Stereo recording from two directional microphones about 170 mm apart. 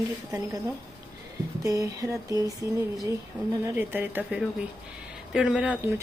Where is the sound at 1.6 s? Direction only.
20° right (ahead or behind).